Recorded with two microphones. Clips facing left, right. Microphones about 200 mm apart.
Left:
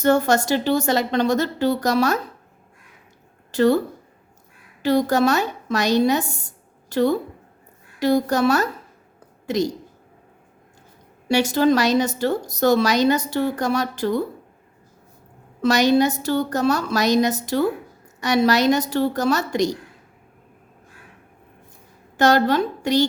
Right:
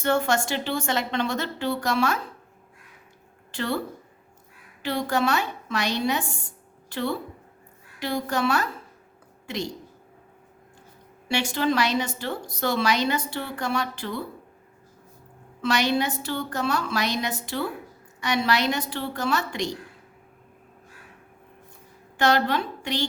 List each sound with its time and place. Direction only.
0.0 s speech: 40° left (ahead or behind)
3.5 s speech: 40° left (ahead or behind)
4.8 s speech: 40° left (ahead or behind)
11.3 s speech: 40° left (ahead or behind)
15.6 s speech: 40° left (ahead or behind)
22.2 s speech: 40° left (ahead or behind)